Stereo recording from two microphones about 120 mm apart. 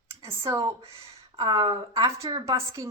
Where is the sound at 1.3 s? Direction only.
35° right (ahead or behind).